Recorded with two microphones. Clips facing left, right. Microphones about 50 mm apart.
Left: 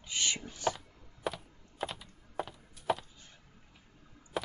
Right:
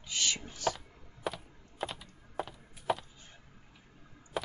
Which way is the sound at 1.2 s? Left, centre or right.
Centre.